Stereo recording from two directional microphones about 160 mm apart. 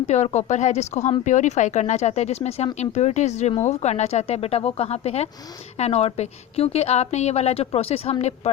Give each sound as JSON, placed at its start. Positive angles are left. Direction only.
{"t": 0.1, "sound": "a woman's voice", "side_deg": 45}